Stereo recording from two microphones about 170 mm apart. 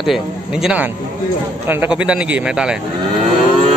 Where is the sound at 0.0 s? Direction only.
Centre (ahead or behind).